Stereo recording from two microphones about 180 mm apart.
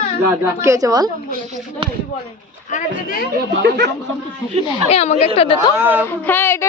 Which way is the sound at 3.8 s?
70° right (ahead or behind).